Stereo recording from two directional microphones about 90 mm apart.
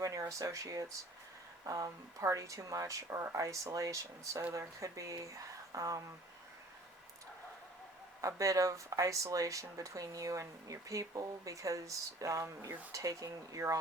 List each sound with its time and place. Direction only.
0.0 s speech: 40° right (ahead or behind)
8.2 s speech: 40° right (ahead or behind)